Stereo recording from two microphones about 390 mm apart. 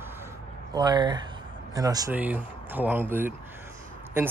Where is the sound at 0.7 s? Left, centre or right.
Centre.